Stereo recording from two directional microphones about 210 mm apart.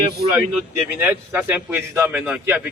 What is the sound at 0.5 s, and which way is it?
A man's voice, 10° right (ahead or behind).